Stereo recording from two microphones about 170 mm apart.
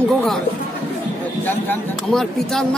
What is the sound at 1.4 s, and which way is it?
Speech, 5° left (ahead or behind).